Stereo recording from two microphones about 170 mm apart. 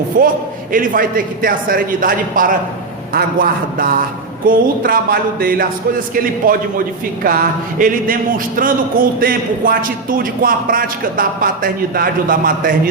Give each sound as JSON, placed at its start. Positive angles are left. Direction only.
{"t": 0.1, "sound": "a man's voice", "side_deg": -55}